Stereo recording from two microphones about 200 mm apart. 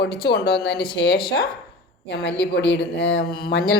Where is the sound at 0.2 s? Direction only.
55° left (ahead or behind).